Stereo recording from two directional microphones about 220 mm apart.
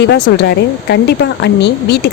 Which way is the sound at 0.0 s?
50° left (ahead or behind).